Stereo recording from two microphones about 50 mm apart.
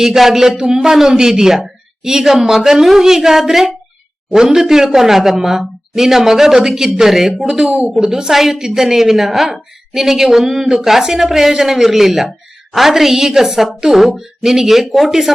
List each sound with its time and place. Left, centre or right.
0.0 s a woman's voice: centre
7.4 s speech: right
7.9 s a woman's voice: centre